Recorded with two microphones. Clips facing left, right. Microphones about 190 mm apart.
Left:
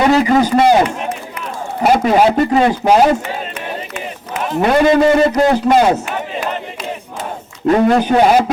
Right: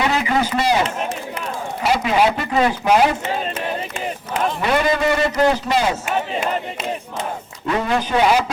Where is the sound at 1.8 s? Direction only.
50° left (ahead or behind).